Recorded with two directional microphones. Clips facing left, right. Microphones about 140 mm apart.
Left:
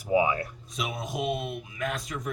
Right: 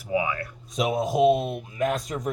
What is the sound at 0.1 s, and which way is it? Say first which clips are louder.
Speech: left 2 dB; 25° left (ahead or behind).